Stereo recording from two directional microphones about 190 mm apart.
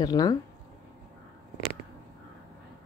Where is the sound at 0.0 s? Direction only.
20° left (ahead or behind).